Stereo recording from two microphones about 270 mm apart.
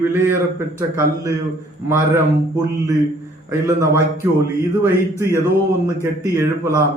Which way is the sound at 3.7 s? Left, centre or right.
Centre.